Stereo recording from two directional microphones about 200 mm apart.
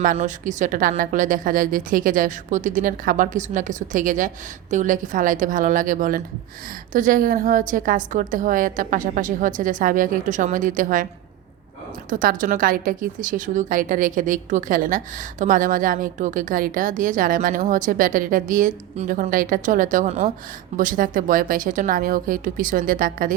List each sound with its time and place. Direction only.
0.0 s a woman's voice: 40° right (ahead or behind)
12.1 s a woman's voice: 45° right (ahead or behind)
20.7 s a woman's voice: 40° right (ahead or behind)